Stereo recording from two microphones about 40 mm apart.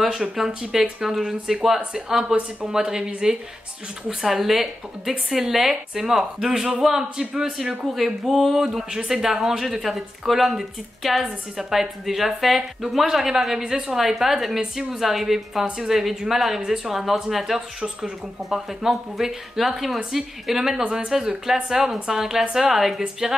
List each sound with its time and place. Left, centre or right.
0.0 s a woman's voice: centre
4.2 s a woman's voice: centre
14.6 s a woman's voice: centre